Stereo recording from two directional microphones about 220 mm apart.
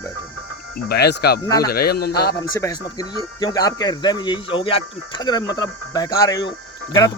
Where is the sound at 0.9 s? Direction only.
50° left (ahead or behind).